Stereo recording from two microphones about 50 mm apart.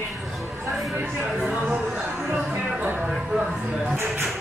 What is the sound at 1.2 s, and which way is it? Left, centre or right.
Speech, centre.